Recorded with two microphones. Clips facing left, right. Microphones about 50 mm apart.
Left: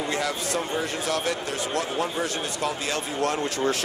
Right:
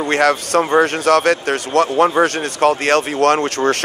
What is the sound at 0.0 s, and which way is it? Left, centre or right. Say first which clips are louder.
Speech: right 12 dB; right.